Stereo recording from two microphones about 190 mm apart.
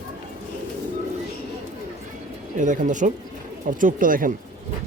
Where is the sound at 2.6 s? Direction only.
40° right (ahead or behind).